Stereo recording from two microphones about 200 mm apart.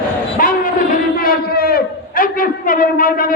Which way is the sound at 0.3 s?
40° left (ahead or behind).